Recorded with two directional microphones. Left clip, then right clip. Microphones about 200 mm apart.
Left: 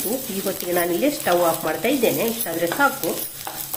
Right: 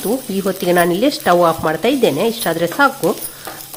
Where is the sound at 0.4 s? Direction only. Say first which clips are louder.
Right 9 dB; 45° right (ahead or behind).